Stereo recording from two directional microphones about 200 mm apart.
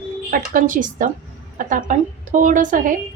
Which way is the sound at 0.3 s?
45° right (ahead or behind).